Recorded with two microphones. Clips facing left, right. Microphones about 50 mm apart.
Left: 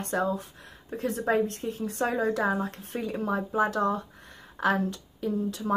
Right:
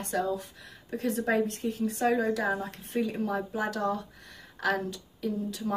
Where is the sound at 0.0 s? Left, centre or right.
Left.